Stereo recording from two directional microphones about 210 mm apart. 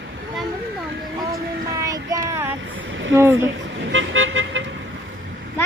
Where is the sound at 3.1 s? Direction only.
10° right (ahead or behind).